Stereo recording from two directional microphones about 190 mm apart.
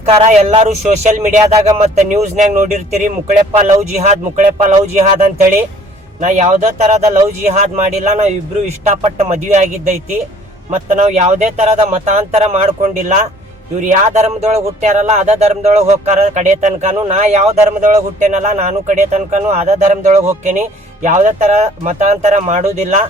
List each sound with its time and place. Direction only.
0.0 s speech: 35° right (ahead or behind)